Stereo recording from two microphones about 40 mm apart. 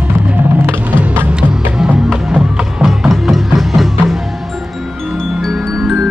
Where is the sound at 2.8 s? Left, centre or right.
Centre.